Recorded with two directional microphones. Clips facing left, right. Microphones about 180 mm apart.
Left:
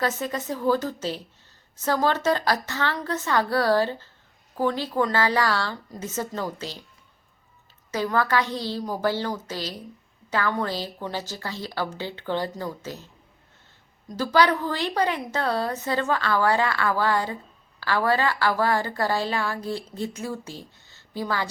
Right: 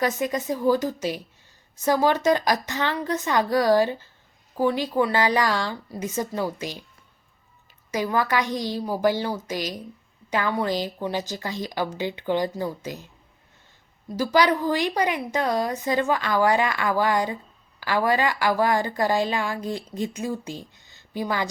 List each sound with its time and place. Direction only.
0.0 s a woman's voice: 15° right (ahead or behind)
7.9 s a woman's voice: 10° right (ahead or behind)
14.2 s a woman's voice: 10° right (ahead or behind)